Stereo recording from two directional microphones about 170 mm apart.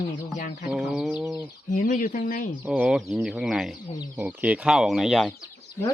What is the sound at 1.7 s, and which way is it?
Speech, 50° left (ahead or behind).